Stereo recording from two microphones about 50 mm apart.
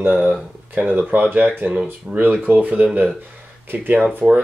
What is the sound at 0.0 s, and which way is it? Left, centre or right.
Speech, right.